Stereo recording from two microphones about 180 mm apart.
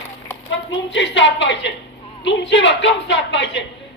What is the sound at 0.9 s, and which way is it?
A woman's voice, 80° left.